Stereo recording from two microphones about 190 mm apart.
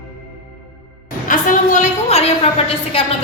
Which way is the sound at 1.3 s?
40° left (ahead or behind).